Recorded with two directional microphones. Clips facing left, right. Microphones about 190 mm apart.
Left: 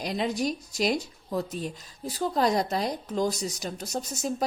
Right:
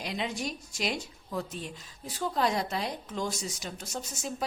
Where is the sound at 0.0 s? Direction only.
40° left (ahead or behind).